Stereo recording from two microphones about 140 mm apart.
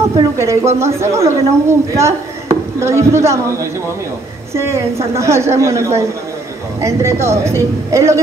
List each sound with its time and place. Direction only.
0.4 s a woman's voice: 20° right (ahead or behind)
4.6 s a woman's voice: 20° right (ahead or behind)